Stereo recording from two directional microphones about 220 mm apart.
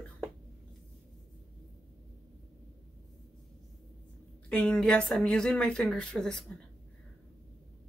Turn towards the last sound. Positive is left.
turn(degrees=5)  # may be behind; listen again after turning